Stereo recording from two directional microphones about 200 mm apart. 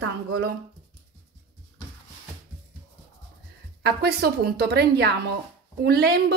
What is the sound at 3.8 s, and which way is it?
A woman's voice, 50° right (ahead or behind).